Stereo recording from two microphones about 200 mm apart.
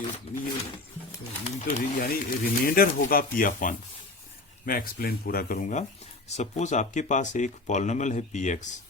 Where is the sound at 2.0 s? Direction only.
45° left (ahead or behind).